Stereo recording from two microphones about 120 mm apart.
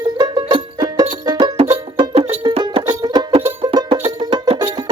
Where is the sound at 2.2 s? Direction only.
55° right (ahead or behind).